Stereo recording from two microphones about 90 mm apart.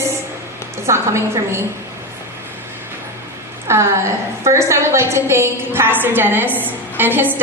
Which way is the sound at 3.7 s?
30° right (ahead or behind).